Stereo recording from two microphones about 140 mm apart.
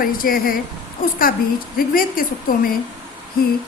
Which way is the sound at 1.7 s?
90° left.